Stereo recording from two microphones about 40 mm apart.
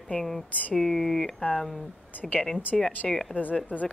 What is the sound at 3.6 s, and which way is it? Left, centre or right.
Speech, left.